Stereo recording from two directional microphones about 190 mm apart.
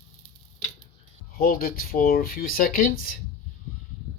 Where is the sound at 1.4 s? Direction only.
50° left (ahead or behind).